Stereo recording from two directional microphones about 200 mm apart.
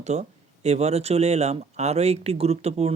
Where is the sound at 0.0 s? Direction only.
35° right (ahead or behind).